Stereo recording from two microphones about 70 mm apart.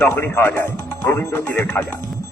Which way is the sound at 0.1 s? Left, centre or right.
Left.